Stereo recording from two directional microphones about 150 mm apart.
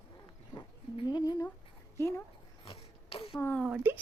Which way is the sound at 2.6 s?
40° left (ahead or behind).